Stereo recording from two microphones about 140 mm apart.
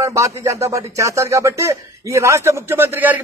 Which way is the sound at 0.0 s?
20° right (ahead or behind).